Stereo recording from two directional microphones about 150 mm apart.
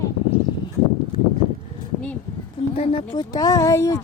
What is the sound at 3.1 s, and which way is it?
Speech, 30° left (ahead or behind).